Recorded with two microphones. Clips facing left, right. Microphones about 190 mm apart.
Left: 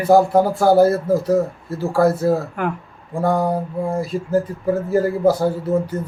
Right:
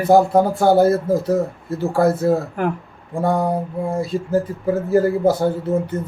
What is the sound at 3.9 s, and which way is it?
Speech, 25° right (ahead or behind).